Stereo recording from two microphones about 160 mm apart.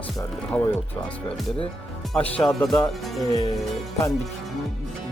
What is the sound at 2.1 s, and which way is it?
Speech, 5° left (ahead or behind).